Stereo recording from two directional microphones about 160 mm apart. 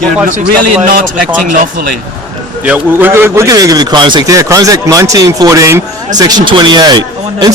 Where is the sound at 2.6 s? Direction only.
10° right (ahead or behind).